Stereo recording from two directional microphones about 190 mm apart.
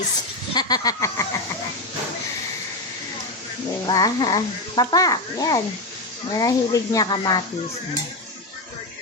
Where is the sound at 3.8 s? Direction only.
20° left (ahead or behind).